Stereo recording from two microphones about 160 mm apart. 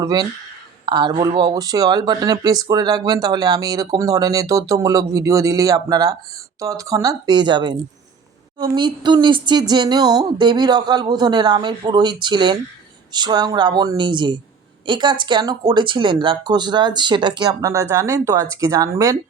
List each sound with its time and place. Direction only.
0.0 s speech: 25° right (ahead or behind)